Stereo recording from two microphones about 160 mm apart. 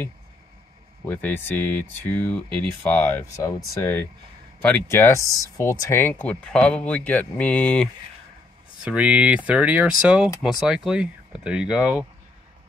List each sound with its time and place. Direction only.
1.0 s speech: 10° left (ahead or behind)
8.8 s speech: 10° right (ahead or behind)